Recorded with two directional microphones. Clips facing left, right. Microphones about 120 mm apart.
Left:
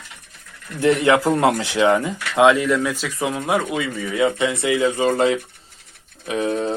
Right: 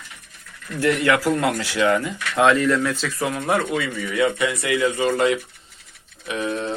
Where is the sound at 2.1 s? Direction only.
15° left (ahead or behind).